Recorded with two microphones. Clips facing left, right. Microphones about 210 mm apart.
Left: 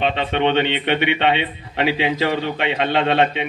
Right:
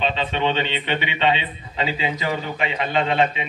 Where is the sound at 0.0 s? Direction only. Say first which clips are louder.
Left 4 dB; 65° left (ahead or behind).